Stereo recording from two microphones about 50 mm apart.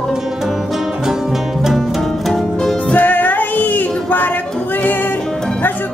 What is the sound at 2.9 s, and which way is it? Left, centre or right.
Music, left.